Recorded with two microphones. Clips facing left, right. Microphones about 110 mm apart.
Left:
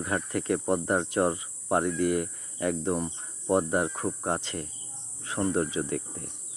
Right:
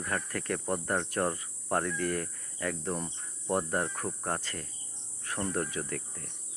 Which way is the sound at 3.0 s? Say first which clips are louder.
Left 6 dB; 15° left (ahead or behind).